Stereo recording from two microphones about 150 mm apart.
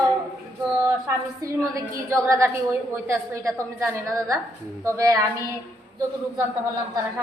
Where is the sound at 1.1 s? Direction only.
20° right (ahead or behind).